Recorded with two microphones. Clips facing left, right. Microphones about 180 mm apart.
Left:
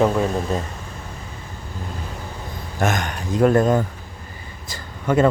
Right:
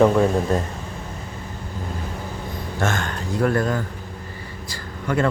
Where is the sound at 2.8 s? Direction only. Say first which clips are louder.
Left 2 dB; 15° left (ahead or behind).